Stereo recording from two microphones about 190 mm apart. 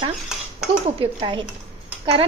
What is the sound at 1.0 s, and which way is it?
Speech, 25° right (ahead or behind).